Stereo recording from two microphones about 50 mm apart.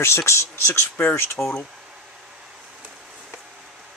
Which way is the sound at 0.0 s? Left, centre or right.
Left.